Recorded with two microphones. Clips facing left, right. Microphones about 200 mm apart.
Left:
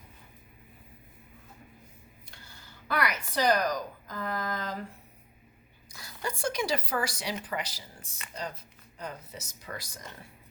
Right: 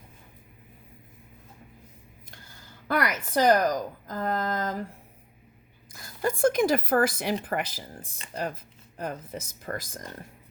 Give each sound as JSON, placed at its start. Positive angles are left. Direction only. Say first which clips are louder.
{"t": 2.8, "sound": "speech", "louder": "right 4 dB", "side_deg": -45}
{"t": 6.0, "sound": "speech", "louder": "right 10 dB", "side_deg": -50}
{"t": 9.0, "sound": "speech", "louder": "right 7 dB", "side_deg": -55}